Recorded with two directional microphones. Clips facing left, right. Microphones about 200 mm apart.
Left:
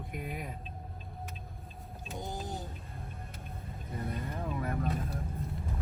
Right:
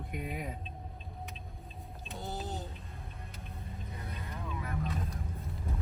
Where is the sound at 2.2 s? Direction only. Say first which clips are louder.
Even; 15° left (ahead or behind).